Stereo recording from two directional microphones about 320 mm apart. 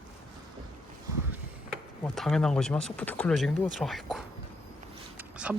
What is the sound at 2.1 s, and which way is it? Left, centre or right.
Speech, centre.